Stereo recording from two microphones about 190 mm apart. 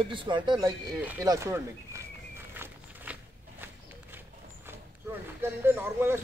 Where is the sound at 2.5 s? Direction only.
10° right (ahead or behind).